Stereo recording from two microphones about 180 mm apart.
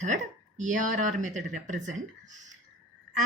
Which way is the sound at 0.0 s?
45° right (ahead or behind).